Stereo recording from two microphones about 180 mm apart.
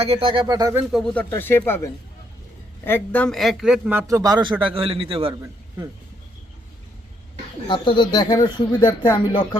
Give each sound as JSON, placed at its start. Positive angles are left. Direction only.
{"t": 0.0, "sound": "speech", "side_deg": -30}
{"t": 0.9, "sound": "a man's voice", "side_deg": 0}
{"t": 5.4, "sound": "a man's voice", "side_deg": -15}
{"t": 7.7, "sound": "speech", "side_deg": 25}